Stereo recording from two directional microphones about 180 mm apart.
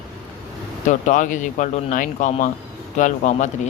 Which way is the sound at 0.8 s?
45° left (ahead or behind).